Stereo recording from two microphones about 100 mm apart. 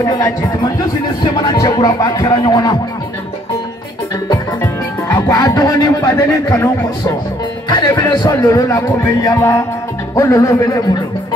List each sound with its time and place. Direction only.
0.0 s speech: 35° left (ahead or behind)
4.6 s music: 25° left (ahead or behind)
5.3 s speech: 40° left (ahead or behind)
7.8 s speech: 40° left (ahead or behind)
9.4 s music: 25° left (ahead or behind)
10.1 s speech: 35° left (ahead or behind)